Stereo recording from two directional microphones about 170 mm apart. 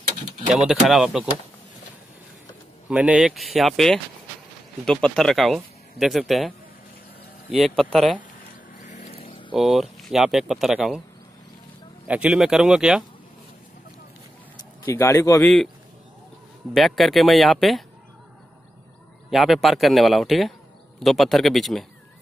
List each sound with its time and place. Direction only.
0.5 s speech: 5° right (ahead or behind)
2.9 s speech: 5° right (ahead or behind)
8.7 s vehicle: 45° left (ahead or behind)
9.5 s speech: centre (ahead or behind)
12.1 s speech: 5° right (ahead or behind)
14.9 s speech: 20° left (ahead or behind)
15.4 s speech: centre (ahead or behind)
16.7 s speech: centre (ahead or behind)
19.3 s speech: centre (ahead or behind)